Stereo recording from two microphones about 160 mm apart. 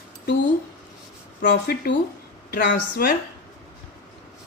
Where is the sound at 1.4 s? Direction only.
90° left.